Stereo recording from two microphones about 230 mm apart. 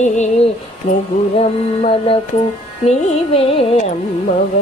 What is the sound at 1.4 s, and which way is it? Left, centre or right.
Music, left.